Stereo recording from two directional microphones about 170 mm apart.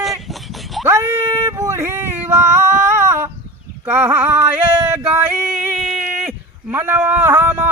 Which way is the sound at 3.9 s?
10° right (ahead or behind).